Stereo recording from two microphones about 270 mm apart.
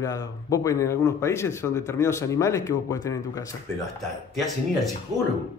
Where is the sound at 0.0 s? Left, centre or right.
Centre.